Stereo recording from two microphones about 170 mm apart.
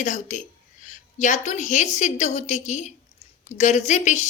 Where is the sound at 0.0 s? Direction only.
45° left (ahead or behind).